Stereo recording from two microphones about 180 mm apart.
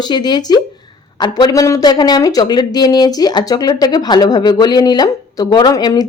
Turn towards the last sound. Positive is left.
turn(degrees=20)  # may be behind; listen again after turning